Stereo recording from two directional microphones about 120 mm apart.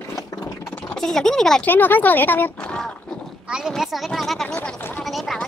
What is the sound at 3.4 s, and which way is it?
Speech, 5° right (ahead or behind).